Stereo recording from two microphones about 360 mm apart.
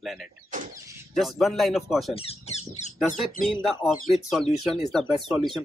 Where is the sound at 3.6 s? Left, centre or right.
Centre.